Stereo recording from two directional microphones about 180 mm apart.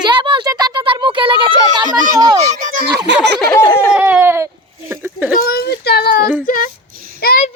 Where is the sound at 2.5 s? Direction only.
45° right (ahead or behind).